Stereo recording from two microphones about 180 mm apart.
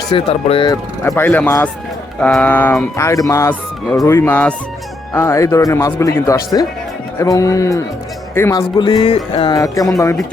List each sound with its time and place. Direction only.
0.1 s speech: 30° left (ahead or behind)
0.7 s a man's voice: 15° left (ahead or behind)
8.8 s music: 25° left (ahead or behind)
9.6 s a man's voice: 20° left (ahead or behind)